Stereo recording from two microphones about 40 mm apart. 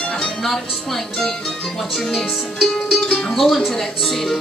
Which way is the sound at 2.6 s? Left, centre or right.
Centre.